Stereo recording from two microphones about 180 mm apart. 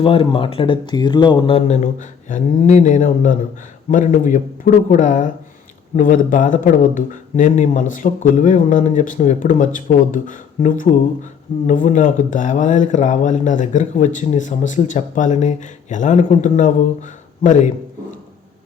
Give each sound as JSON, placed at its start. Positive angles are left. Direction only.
{"t": 0.0, "sound": "speech", "side_deg": 30}